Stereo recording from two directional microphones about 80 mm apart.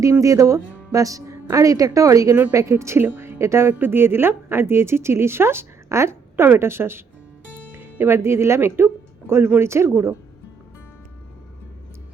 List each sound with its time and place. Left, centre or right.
0.0 s a woman's voice: right